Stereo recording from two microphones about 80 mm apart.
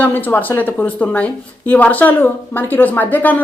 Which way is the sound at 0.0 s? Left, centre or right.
Left.